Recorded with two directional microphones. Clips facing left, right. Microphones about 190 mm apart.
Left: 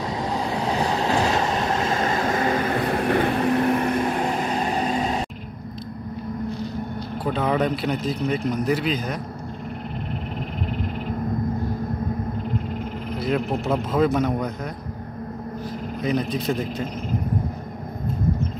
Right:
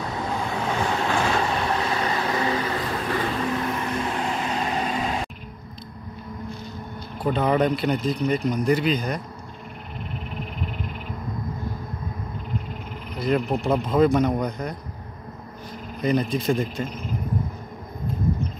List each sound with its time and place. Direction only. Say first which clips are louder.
0.4 s train: left 2 dB; 35° left (ahead or behind); by 4.3 s 55° left (ahead or behind)
4.3 s vehicle: left 2 dB; 40° left (ahead or behind)
7.2 s speech: right 2 dB; 5° left (ahead or behind)
13.2 s speech: right 2 dB; centre (ahead or behind)
16.0 s speech: right 2 dB; centre (ahead or behind)